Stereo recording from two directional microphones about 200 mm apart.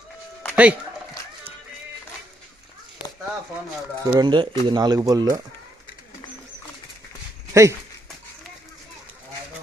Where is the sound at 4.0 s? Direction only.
20° right (ahead or behind).